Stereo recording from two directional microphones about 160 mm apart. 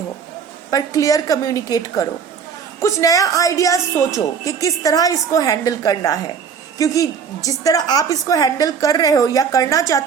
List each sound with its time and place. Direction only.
0.7 s a woman's voice: 20° left (ahead or behind)